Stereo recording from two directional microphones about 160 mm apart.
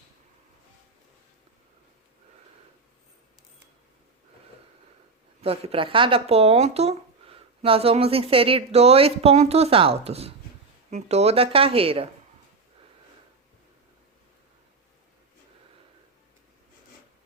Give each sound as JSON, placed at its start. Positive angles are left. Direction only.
{"t": 5.4, "sound": "speech", "side_deg": -40}